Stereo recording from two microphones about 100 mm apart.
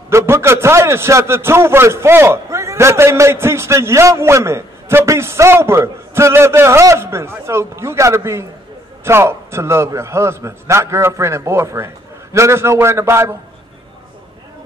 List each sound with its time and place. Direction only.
0.1 s a man's voice: 25° right (ahead or behind)